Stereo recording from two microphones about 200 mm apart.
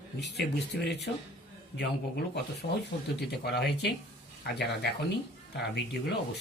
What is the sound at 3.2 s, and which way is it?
Speech, 55° left (ahead or behind).